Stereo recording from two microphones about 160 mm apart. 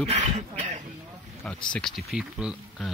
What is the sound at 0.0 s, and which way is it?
Speech, 45° right (ahead or behind).